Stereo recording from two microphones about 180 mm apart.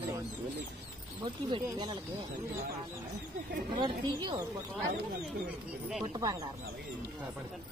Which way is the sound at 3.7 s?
25° right (ahead or behind).